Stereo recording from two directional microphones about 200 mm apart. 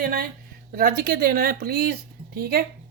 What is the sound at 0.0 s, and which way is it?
A woman's voice, 45° right (ahead or behind).